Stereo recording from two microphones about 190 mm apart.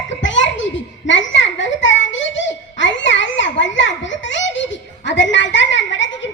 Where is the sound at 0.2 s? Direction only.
75° left (ahead or behind).